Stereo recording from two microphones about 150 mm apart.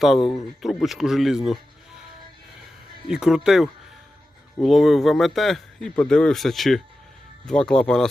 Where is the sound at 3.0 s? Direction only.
5° right (ahead or behind).